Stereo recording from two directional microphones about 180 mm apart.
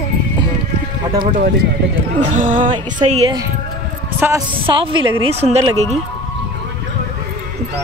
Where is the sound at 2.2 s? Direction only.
45° right (ahead or behind).